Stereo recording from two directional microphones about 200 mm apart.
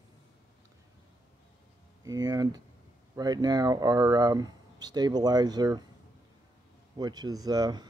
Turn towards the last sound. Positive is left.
turn(degrees=-20)  # may be behind; listen again after turning